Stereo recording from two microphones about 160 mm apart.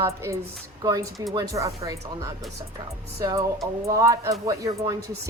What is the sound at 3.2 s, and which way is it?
A woman's voice, 20° right (ahead or behind).